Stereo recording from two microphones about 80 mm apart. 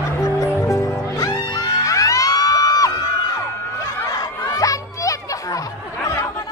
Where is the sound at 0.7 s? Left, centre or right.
Left.